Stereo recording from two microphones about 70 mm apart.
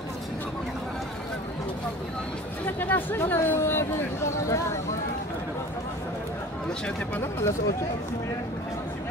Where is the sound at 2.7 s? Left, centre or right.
Left.